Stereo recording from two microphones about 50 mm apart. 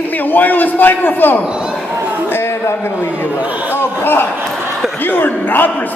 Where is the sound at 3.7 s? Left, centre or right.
Left.